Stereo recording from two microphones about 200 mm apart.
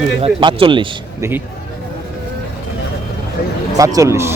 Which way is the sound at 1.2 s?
10° right (ahead or behind).